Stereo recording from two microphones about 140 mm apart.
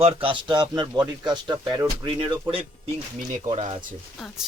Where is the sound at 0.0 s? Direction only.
40° right (ahead or behind).